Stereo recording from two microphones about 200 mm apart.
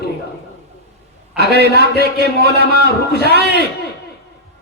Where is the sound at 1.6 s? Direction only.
55° left (ahead or behind).